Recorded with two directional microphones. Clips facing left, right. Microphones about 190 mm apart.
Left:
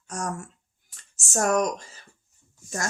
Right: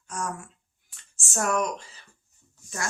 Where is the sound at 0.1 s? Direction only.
40° left (ahead or behind).